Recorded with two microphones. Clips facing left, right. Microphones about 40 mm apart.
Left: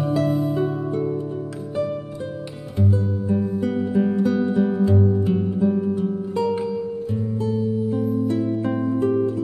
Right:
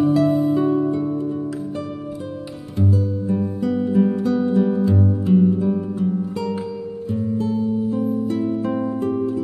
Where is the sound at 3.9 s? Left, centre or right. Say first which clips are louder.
Right 2 dB; centre.